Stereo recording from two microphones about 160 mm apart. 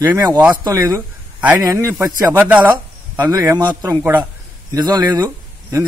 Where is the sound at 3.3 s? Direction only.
25° right (ahead or behind).